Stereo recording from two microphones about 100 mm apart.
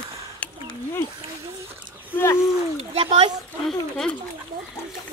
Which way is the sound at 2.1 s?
25° left (ahead or behind).